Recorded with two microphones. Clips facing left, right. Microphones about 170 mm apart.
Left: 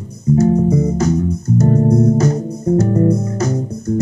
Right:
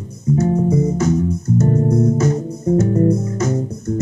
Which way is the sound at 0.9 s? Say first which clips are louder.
Left 1 dB; 35° left (ahead or behind).